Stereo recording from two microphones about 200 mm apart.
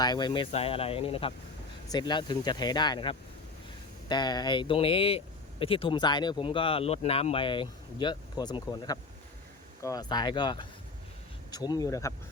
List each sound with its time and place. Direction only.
0.0 s speech: 20° left (ahead or behind)